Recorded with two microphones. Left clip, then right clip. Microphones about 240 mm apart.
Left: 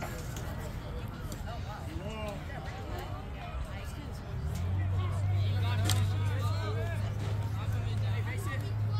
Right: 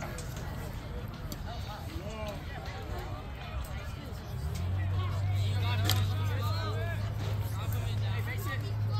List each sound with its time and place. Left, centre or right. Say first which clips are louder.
5.6 s vehicle: right 2 dB; right